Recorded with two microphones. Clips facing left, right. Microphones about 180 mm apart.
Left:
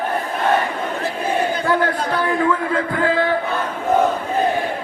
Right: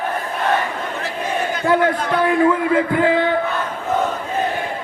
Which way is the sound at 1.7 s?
20° right (ahead or behind).